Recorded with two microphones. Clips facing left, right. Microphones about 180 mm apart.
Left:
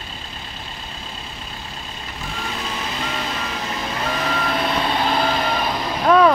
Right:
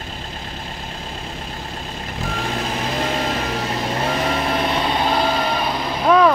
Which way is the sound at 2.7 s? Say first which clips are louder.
Right 6 dB; 40° right (ahead or behind).